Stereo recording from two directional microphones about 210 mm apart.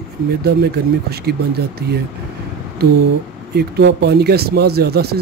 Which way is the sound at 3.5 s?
50° right (ahead or behind).